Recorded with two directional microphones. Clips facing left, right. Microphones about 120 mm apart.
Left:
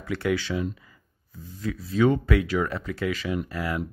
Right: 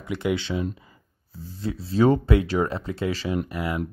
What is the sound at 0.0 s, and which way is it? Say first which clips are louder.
Speech: even; 20° right (ahead or behind).